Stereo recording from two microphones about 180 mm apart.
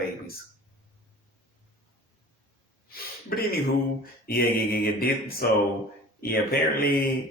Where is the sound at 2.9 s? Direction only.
55° left (ahead or behind).